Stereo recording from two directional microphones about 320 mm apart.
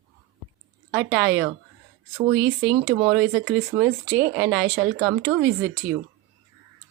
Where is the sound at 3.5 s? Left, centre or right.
Right.